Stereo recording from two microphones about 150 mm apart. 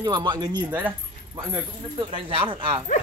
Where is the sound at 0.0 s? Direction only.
30° right (ahead or behind).